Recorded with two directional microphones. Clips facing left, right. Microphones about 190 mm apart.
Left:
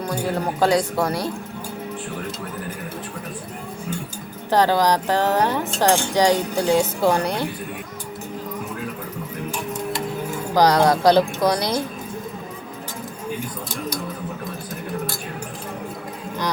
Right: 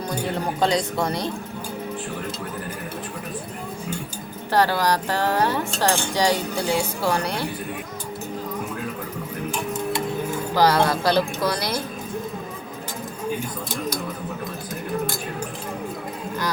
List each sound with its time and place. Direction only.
0.1 s speech: 5° left (ahead or behind)
4.5 s speech: 15° left (ahead or behind)
10.5 s speech: 15° left (ahead or behind)